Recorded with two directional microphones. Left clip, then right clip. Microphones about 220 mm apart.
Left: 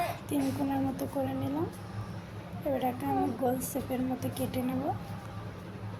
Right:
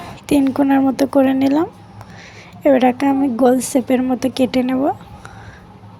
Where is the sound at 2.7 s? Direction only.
40° right (ahead or behind).